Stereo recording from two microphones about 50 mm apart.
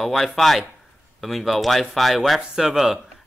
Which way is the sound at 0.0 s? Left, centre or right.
Centre.